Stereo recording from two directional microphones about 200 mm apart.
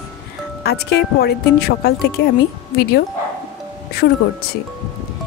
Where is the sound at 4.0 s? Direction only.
55° left (ahead or behind).